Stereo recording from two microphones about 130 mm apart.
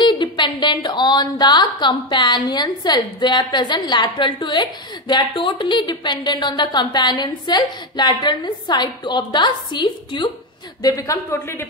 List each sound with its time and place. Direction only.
0.0 s a woman's voice: 35° left (ahead or behind); by 11.6 s 20° left (ahead or behind)